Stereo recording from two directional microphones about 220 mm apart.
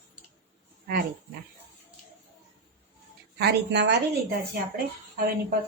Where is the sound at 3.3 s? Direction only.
50° right (ahead or behind).